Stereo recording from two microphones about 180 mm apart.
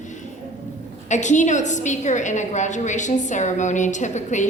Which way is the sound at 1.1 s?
40° left (ahead or behind).